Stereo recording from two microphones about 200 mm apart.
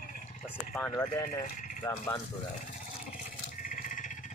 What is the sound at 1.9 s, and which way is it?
Speech, 15° left (ahead or behind).